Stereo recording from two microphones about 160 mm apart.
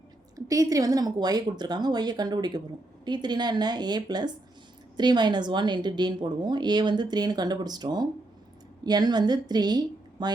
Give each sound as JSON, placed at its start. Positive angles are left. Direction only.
{"t": 0.3, "sound": "a woman's voice", "side_deg": -20}